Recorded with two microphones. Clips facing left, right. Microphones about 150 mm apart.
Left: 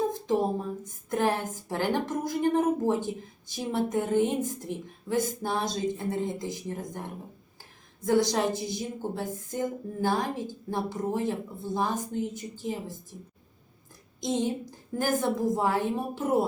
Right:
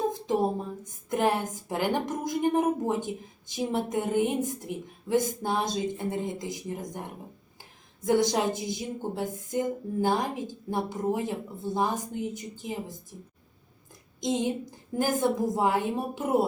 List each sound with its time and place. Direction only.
1.1 s a woman's voice: 15° right (ahead or behind)
8.0 s a woman's voice: 20° right (ahead or behind)
14.2 s a woman's voice: 15° right (ahead or behind)